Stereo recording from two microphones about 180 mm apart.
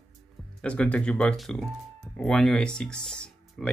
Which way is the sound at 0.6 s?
5° left (ahead or behind).